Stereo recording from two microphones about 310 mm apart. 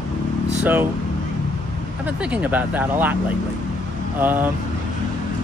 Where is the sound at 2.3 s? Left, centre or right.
Centre.